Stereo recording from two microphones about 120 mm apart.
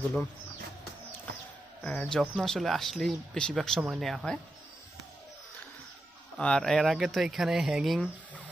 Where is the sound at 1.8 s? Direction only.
10° left (ahead or behind).